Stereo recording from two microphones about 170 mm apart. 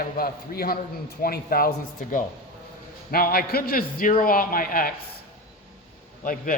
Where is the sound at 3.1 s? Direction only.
60° left (ahead or behind).